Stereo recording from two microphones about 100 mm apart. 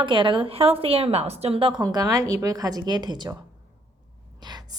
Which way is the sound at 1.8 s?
40° right (ahead or behind).